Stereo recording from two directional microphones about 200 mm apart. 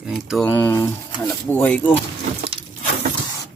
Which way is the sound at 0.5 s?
10° left (ahead or behind).